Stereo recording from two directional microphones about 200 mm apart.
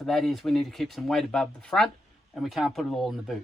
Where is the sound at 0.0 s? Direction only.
Centre (ahead or behind).